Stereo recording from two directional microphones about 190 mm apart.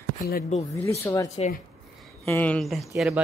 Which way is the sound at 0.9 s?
15° left (ahead or behind).